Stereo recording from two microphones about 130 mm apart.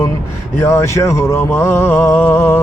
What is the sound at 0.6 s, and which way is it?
Speech, 20° left (ahead or behind).